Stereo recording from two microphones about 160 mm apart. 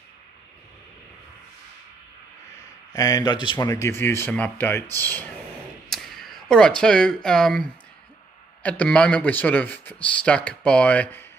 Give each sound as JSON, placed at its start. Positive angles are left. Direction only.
{"t": 2.9, "sound": "speech", "side_deg": 20}
{"t": 3.7, "sound": "speech", "side_deg": 15}
{"t": 5.9, "sound": "speech", "side_deg": 0}